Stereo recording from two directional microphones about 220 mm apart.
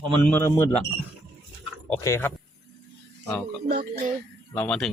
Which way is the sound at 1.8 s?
10° left (ahead or behind).